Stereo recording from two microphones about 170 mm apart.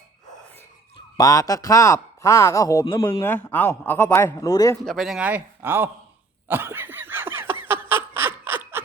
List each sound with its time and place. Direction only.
0.9 s speech: 20° left (ahead or behind)
4.9 s a man's voice: centre (ahead or behind)
6.5 s snicker: 10° right (ahead or behind)